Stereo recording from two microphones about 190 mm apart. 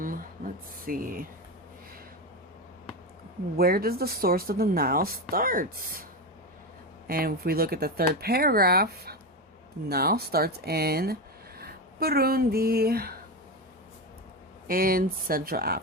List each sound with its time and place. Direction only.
0.0 s a sound: 45° right (ahead or behind)
3.6 s speech: 50° right (ahead or behind)
7.1 s speech: 50° right (ahead or behind)
14.7 s speech: 50° right (ahead or behind)